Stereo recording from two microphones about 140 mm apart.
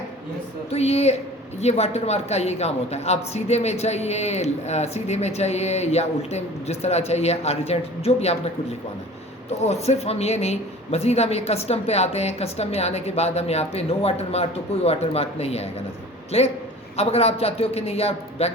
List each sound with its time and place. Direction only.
0.7 s speech: 45° left (ahead or behind)
9.6 s speech: 50° left (ahead or behind)